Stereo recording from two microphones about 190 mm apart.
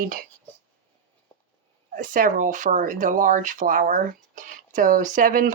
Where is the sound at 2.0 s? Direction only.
45° right (ahead or behind).